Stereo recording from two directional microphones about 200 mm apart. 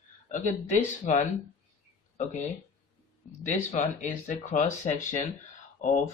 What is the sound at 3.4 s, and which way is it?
Speech, 40° left (ahead or behind).